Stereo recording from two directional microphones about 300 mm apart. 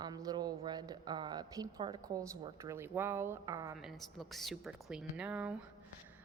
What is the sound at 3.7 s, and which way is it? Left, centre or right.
A woman's voice, centre.